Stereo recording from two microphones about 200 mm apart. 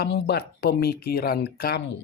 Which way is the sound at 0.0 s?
55° left (ahead or behind).